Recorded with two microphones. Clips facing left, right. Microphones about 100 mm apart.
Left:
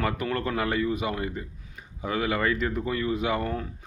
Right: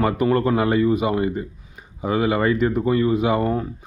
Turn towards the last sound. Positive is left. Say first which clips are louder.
# right 7 dB
turn(degrees=-25)  # may be behind; listen again after turning